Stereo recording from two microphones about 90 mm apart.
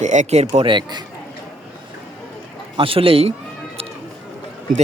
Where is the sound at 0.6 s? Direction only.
60° right (ahead or behind).